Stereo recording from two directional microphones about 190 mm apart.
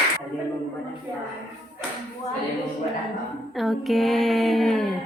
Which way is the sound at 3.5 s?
Centre (ahead or behind).